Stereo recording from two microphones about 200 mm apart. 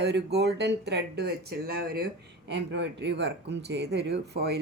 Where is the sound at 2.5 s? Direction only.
60° right (ahead or behind).